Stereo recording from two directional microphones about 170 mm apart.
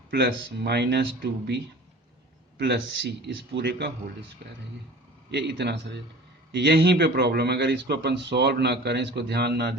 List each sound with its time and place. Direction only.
0.1 s a man's voice: 75° right (ahead or behind)
4.4 s speech: 65° right (ahead or behind)
5.3 s a man's voice: 80° right